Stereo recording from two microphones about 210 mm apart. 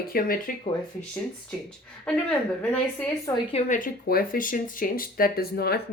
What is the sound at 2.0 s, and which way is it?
A woman's voice, 5° left (ahead or behind).